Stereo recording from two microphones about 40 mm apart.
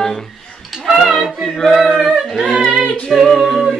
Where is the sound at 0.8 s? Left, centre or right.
Centre.